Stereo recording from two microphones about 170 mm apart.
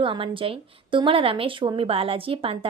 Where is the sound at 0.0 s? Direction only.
30° right (ahead or behind).